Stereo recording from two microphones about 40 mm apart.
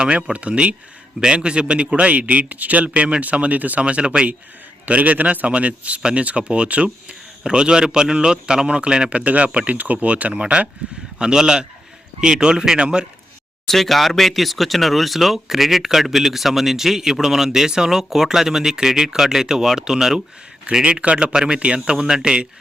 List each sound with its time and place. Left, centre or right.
0.0 s a man's voice: right
3.8 s speech: right
4.9 s a man's voice: right
6.0 s speech: right
9.0 s a man's voice: right
11.2 s speech: centre
13.7 s speech: centre
20.8 s speech: right